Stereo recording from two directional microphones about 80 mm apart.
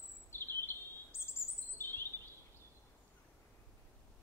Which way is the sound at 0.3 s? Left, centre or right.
Left.